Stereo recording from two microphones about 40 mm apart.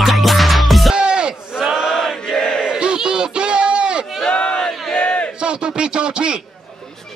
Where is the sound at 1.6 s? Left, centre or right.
Centre.